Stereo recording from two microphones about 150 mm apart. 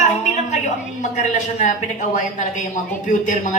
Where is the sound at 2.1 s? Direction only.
55° left (ahead or behind).